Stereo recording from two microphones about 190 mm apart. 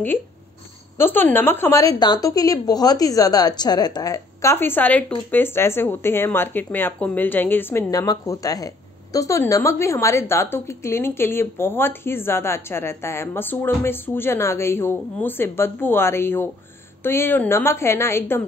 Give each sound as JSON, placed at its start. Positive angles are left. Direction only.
{"t": 0.9, "sound": "a woman's voice", "side_deg": 10}